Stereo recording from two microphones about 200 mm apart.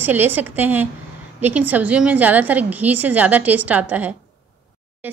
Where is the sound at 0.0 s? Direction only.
10° right (ahead or behind).